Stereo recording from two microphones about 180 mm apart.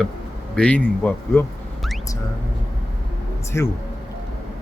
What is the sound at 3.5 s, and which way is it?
Speech, 10° left (ahead or behind).